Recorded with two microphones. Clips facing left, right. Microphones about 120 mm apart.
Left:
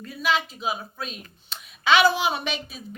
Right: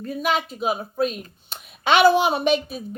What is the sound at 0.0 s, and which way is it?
A woman's voice, 50° right (ahead or behind).